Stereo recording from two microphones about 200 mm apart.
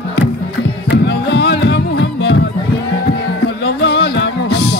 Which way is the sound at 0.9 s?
55° left (ahead or behind).